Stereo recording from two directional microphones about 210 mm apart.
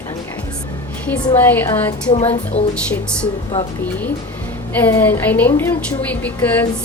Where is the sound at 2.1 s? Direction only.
30° left (ahead or behind).